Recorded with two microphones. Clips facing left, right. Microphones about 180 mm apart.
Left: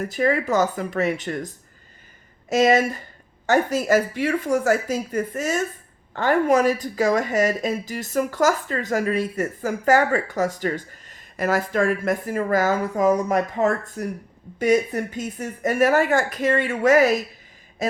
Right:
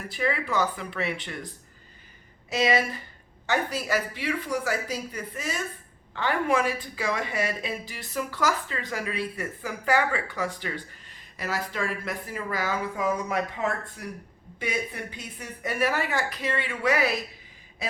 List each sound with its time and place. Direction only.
0.0 s speech: 45° left (ahead or behind)